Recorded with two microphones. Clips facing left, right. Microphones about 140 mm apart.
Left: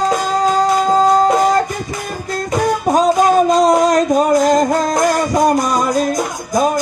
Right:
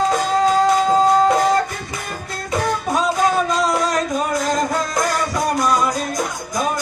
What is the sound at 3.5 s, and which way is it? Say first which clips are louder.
Music: left 8 dB; 40° left (ahead or behind).